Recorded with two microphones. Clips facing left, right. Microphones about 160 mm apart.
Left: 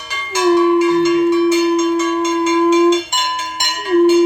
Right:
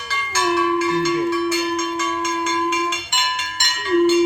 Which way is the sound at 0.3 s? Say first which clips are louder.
Left 8 dB; 20° left (ahead or behind).